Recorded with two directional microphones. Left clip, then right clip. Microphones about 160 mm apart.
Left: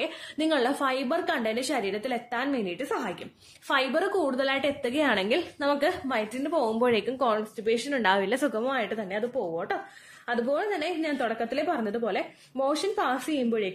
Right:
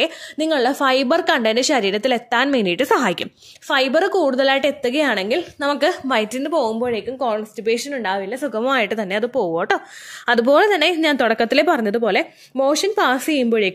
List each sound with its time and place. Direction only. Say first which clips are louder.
0.0 s a woman's voice: right 9 dB; 40° right (ahead or behind); by 3.3 s 70° right (ahead or behind)
3.6 s a woman's voice: right 9 dB; 45° right (ahead or behind); by 5.4 s 30° right (ahead or behind)
5.6 s a woman's voice: right 7 dB; 40° right (ahead or behind)
6.8 s a woman's voice: right 2 dB; 5° right (ahead or behind)
7.2 s speech: right 5 dB; 20° right (ahead or behind)
7.5 s speech: right 7 dB; 35° right (ahead or behind)
7.9 s speech: right 2 dB; 10° right (ahead or behind)
8.2 s a woman's voice: right 2 dB; centre (ahead or behind)
8.6 s a woman's voice: right 10 dB; 45° right (ahead or behind); by 11.6 s 70° right (ahead or behind)
11.6 s a woman's voice: right 11 dB; 50° right (ahead or behind)